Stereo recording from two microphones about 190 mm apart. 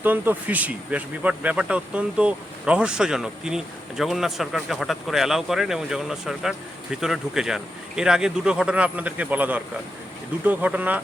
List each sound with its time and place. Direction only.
0.0 s speech: 10° right (ahead or behind)